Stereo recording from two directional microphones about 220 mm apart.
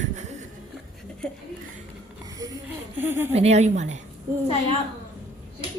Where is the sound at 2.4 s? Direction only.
10° right (ahead or behind).